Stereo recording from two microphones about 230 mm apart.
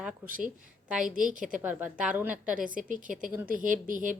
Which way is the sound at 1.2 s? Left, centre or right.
Right.